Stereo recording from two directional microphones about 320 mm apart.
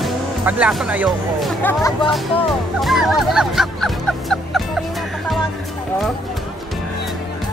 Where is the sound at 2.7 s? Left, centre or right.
Centre.